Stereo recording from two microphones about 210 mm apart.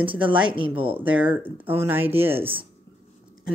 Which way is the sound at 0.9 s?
5° right (ahead or behind).